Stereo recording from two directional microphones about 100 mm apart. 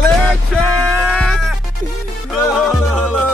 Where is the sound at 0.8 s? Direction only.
5° left (ahead or behind).